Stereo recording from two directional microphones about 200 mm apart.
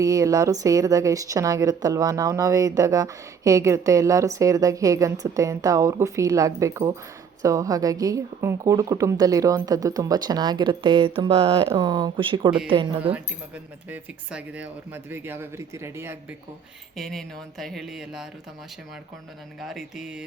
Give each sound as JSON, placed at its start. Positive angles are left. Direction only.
{"t": 0.0, "sound": "a woman's voice", "side_deg": -15}
{"t": 13.9, "sound": "a woman's voice", "side_deg": -5}
{"t": 17.0, "sound": "speech", "side_deg": 0}
{"t": 19.6, "sound": "speech", "side_deg": 0}